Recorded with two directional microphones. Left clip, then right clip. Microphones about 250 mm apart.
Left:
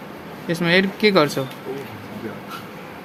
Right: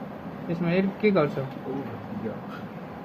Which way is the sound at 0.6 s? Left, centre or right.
Left.